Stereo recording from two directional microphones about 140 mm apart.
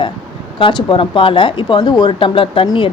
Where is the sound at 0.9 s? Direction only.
40° left (ahead or behind).